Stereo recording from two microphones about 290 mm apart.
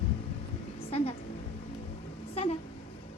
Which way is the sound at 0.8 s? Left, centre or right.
Centre.